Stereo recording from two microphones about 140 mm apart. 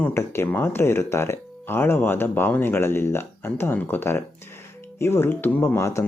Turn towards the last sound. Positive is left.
turn(degrees=20)  # may be behind; listen again after turning